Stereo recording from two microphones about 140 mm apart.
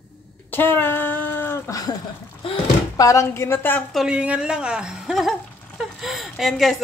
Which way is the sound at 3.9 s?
5° right (ahead or behind).